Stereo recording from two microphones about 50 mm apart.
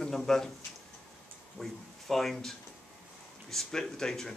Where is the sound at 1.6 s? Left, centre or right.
Centre.